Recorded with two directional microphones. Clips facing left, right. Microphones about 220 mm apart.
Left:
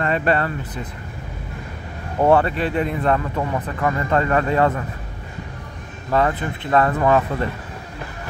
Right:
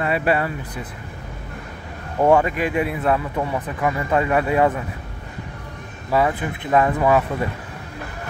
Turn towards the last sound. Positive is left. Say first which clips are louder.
# even
turn(degrees=-10)  # may be behind; listen again after turning